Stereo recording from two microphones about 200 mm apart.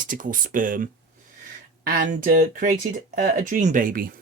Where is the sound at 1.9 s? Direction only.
40° right (ahead or behind).